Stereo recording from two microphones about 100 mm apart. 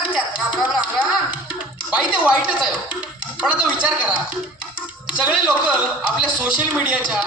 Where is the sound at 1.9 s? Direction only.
10° right (ahead or behind).